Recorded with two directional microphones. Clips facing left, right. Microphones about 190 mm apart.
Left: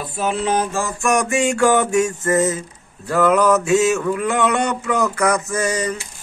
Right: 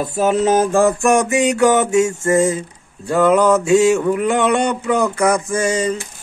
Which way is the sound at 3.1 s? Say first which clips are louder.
Right 2 dB; 25° right (ahead or behind).